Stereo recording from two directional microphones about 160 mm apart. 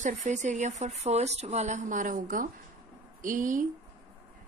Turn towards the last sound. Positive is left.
turn(degrees=-55)  # may be behind; listen again after turning